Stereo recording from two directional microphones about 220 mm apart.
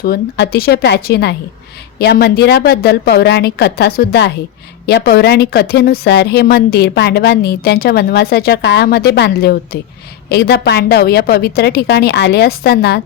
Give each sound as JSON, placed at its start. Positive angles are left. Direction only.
{"t": 0.0, "sound": "speech", "side_deg": 45}